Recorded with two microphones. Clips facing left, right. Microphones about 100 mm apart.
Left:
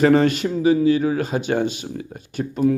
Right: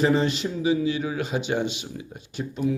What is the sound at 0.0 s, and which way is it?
Speech, 60° left (ahead or behind).